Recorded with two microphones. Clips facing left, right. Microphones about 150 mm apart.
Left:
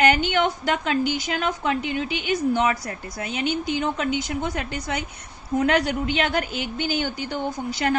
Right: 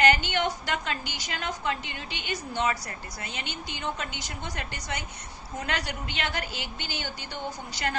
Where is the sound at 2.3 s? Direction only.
50° left (ahead or behind).